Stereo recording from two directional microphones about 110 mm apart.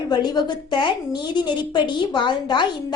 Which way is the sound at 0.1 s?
40° left (ahead or behind).